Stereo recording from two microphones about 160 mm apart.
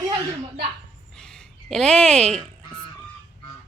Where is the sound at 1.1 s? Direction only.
5° left (ahead or behind).